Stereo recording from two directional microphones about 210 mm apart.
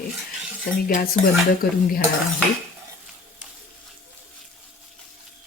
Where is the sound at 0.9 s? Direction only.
40° left (ahead or behind).